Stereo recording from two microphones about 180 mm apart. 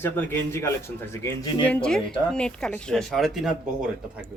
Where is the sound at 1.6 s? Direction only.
5° left (ahead or behind).